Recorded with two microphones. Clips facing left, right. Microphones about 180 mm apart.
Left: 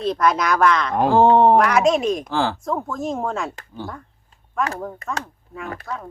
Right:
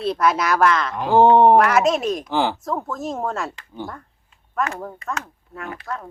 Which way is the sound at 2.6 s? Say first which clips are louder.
Left 1 dB; centre (ahead or behind).